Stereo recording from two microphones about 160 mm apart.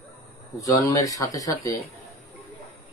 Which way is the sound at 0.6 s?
20° left (ahead or behind).